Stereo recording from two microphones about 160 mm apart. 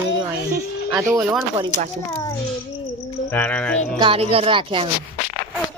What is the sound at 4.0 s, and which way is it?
Speech, 35° right (ahead or behind).